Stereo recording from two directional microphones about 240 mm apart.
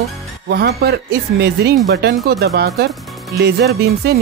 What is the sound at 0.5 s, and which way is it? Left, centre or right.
Speech, right.